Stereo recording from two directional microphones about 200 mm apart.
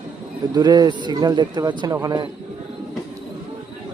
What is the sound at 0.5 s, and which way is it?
Speech, 20° right (ahead or behind).